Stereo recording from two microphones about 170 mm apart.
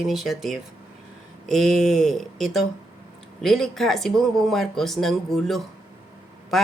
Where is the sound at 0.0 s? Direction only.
Centre (ahead or behind).